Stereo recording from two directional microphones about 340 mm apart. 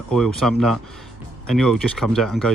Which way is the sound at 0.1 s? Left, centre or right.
Centre.